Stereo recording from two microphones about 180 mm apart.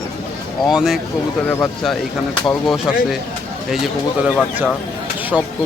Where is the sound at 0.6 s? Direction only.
Centre (ahead or behind).